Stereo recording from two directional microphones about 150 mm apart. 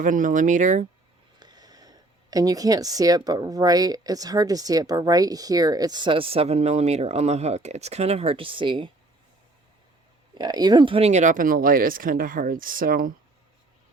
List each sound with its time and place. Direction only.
0.0 s speech: 60° right (ahead or behind)
1.4 s speech: 30° right (ahead or behind)
10.3 s speech: 25° right (ahead or behind); by 13.1 s 70° right (ahead or behind)